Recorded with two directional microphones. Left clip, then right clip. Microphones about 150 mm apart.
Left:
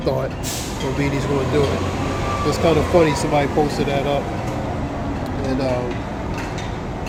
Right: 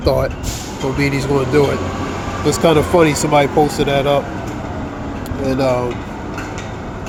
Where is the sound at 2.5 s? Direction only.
45° right (ahead or behind).